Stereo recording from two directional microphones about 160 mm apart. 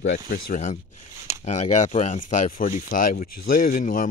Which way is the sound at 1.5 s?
45° left (ahead or behind).